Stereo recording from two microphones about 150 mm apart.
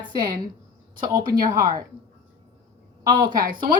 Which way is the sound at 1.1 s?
25° right (ahead or behind).